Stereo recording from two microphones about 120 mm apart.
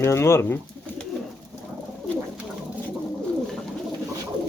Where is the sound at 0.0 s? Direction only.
20° left (ahead or behind).